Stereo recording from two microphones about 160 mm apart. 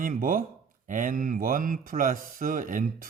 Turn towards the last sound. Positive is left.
turn(degrees=-55)  # may be behind; listen again after turning